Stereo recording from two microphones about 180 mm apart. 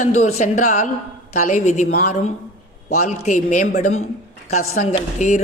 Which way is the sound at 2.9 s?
40° left (ahead or behind).